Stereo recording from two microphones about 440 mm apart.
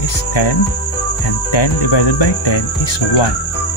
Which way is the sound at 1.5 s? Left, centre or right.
Left.